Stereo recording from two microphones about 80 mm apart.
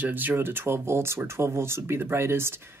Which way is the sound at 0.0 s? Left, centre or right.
Right.